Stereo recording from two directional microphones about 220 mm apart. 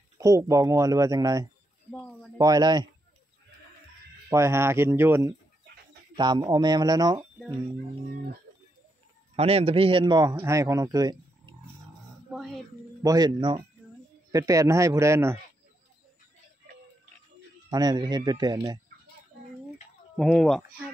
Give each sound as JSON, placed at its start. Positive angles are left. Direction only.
{"t": 0.2, "sound": "a man's voice", "side_deg": -15}
{"t": 1.9, "sound": "speech", "side_deg": 5}
{"t": 2.3, "sound": "a man's voice", "side_deg": -15}
{"t": 4.3, "sound": "a man's voice", "side_deg": -10}
{"t": 9.3, "sound": "a man's voice", "side_deg": -25}
{"t": 12.3, "sound": "a sound", "side_deg": 0}
{"t": 13.0, "sound": "a man's voice", "side_deg": -15}
{"t": 17.6, "sound": "a man's voice", "side_deg": -15}
{"t": 20.2, "sound": "speech", "side_deg": 0}